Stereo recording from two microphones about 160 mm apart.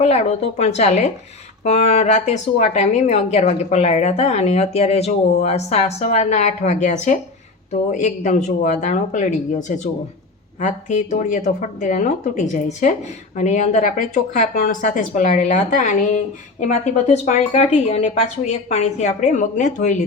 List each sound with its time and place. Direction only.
0.0 s speech: 40° left (ahead or behind)